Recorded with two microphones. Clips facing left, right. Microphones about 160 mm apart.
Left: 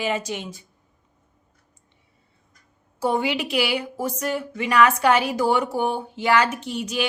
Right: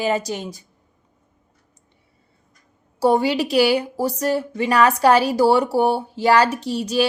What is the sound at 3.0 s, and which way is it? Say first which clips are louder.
Speech: right 6 dB; 35° right (ahead or behind).